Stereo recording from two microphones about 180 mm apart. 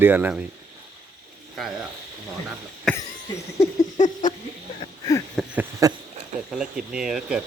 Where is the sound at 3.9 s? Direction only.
45° left (ahead or behind).